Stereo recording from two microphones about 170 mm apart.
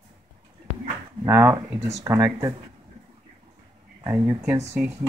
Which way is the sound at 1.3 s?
20° right (ahead or behind).